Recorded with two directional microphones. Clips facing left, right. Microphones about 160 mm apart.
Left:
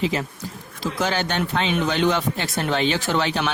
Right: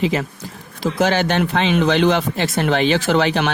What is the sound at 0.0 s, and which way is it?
Speech, 70° right (ahead or behind).